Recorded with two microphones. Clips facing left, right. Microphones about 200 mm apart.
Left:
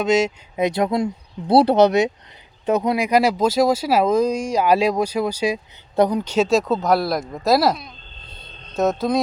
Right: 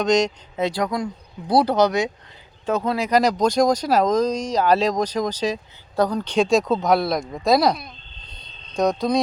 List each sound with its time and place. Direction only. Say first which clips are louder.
0.0 s speech: left 1 dB; 5° left (ahead or behind)